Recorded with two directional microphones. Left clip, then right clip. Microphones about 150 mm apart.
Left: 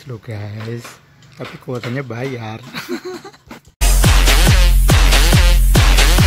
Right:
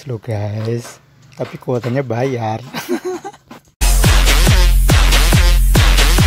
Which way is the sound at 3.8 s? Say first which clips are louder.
Even; centre (ahead or behind).